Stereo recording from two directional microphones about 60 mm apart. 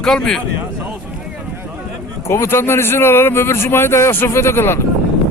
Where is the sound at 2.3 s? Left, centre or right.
Left.